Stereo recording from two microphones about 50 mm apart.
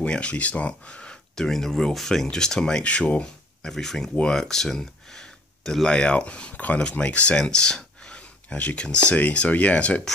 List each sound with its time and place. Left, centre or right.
0.0 s speech: left
1.3 s speech: centre
2.8 s speech: left
3.6 s speech: centre; by 10.0 s left